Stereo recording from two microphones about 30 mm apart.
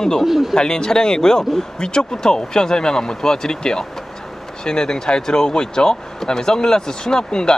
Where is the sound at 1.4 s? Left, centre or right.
Centre.